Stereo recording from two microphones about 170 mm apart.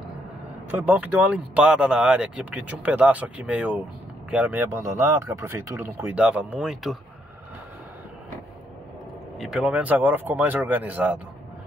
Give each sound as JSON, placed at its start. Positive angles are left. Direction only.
{"t": 0.7, "sound": "speech", "side_deg": -10}
{"t": 5.9, "sound": "speech", "side_deg": -5}
{"t": 9.4, "sound": "speech", "side_deg": -5}